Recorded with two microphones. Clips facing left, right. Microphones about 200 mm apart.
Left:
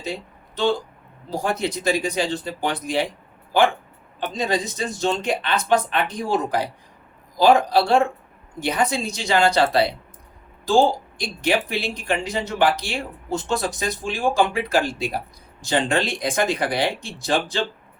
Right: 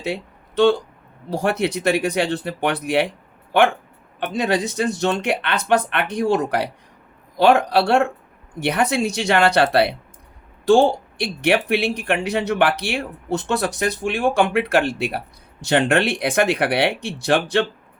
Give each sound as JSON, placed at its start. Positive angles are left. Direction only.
{"t": 0.0, "sound": "a sound", "side_deg": -65}
{"t": 1.3, "sound": "speech", "side_deg": -65}
{"t": 4.4, "sound": "speech", "side_deg": -65}